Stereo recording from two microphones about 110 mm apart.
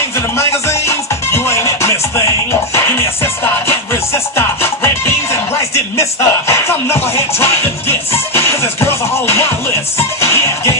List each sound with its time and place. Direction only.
0.4 s music: 25° left (ahead or behind)
4.4 s music: 25° left (ahead or behind)